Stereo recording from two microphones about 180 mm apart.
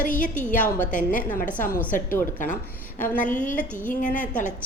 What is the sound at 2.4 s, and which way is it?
A woman's voice, 45° left (ahead or behind).